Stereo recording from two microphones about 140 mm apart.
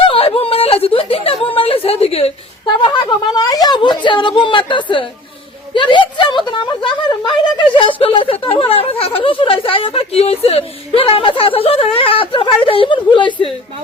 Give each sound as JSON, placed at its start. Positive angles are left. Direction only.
{"t": 0.0, "sound": "whimper", "side_deg": 40}
{"t": 2.8, "sound": "speech", "side_deg": 35}